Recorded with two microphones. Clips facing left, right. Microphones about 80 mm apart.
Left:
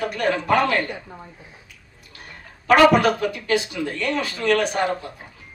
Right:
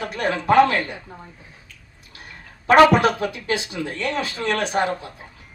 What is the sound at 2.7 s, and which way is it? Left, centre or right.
A man's voice, right.